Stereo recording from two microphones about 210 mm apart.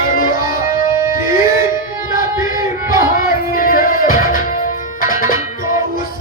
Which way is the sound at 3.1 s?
40° left (ahead or behind).